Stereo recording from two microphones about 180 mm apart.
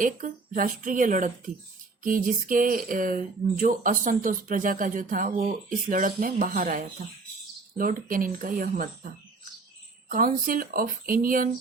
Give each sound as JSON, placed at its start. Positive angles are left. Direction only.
{"t": 0.0, "sound": "speech", "side_deg": -50}
{"t": 10.1, "sound": "speech", "side_deg": -50}